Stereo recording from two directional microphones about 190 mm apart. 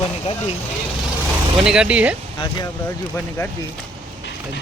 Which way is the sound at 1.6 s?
5° right (ahead or behind).